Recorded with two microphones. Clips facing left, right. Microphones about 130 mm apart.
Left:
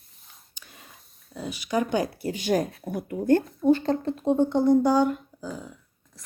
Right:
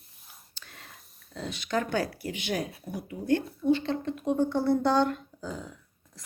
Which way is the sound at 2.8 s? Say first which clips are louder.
Left 7 dB; 55° left (ahead or behind).